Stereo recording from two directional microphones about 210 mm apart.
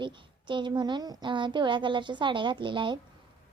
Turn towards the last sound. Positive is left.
turn(degrees=-25)  # may be behind; listen again after turning